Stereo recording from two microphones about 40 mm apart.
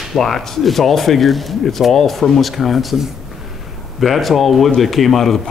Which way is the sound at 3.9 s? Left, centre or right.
Centre.